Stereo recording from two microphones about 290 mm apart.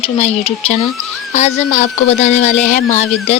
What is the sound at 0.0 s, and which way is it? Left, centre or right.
Speech, centre.